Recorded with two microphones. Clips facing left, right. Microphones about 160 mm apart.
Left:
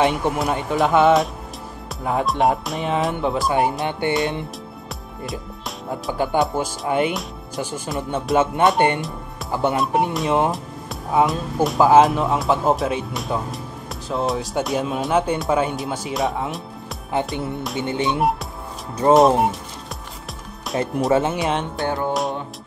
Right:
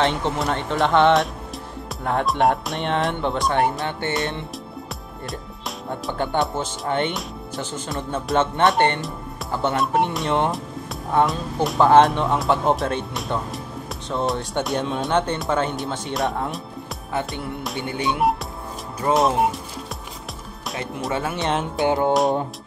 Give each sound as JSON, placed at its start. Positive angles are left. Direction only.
{"t": 0.0, "sound": "speech", "side_deg": 10}
{"t": 5.9, "sound": "speech", "side_deg": 5}
{"t": 9.8, "sound": "speech", "side_deg": 0}
{"t": 17.7, "sound": "music", "side_deg": 25}
{"t": 19.1, "sound": "speech", "side_deg": 0}
{"t": 20.7, "sound": "music", "side_deg": 0}
{"t": 21.1, "sound": "music", "side_deg": 25}
{"t": 21.4, "sound": "speech", "side_deg": 0}
{"t": 21.8, "sound": "music", "side_deg": -20}